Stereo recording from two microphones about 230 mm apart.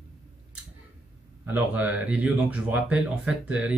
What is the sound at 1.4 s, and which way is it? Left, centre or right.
Speech, centre.